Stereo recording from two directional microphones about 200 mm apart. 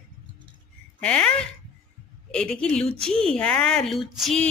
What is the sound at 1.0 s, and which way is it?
Speech, 5° left (ahead or behind).